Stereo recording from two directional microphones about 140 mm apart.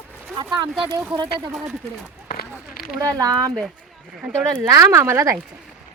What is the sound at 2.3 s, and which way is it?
Run, 90° left.